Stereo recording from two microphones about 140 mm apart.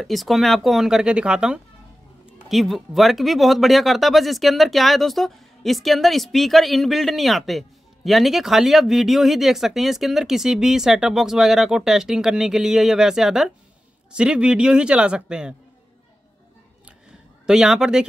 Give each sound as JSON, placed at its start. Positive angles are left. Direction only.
{"t": 0.0, "sound": "a man's voice", "side_deg": 0}
{"t": 17.5, "sound": "speech", "side_deg": -5}